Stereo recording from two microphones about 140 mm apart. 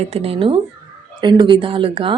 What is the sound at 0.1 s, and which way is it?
Speech, 45° right (ahead or behind).